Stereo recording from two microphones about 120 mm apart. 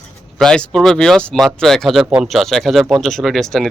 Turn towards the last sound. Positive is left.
turn(degrees=5)  # may be behind; listen again after turning